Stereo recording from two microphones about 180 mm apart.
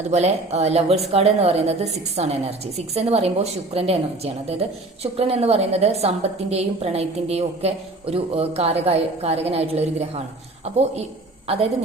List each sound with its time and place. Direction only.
0.1 s a woman's voice: 40° right (ahead or behind)